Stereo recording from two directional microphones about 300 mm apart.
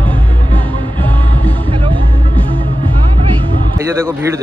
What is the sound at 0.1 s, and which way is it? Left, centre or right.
Music, centre.